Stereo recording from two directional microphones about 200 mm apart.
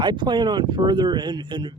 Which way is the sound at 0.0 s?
20° right (ahead or behind).